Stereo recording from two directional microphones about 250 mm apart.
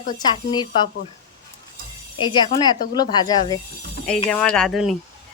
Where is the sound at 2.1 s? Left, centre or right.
Centre.